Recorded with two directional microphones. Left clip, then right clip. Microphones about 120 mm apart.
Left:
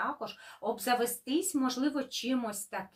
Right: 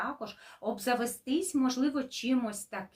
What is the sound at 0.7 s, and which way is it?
Speech, 25° right (ahead or behind).